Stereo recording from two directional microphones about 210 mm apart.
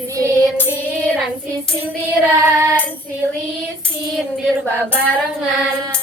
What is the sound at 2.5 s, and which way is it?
Speech, 15° right (ahead or behind).